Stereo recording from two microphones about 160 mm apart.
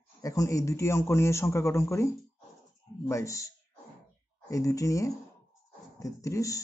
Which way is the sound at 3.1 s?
20° left (ahead or behind).